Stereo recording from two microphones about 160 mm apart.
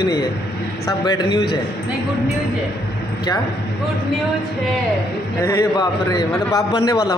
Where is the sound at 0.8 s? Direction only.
25° left (ahead or behind).